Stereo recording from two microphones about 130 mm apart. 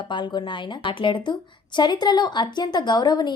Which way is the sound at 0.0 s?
35° left (ahead or behind).